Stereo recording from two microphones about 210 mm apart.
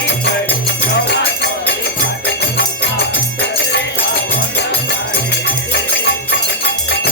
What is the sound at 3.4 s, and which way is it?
Music, 55° left (ahead or behind).